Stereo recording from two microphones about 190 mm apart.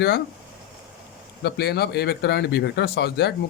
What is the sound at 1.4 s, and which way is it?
Speech, 55° left (ahead or behind).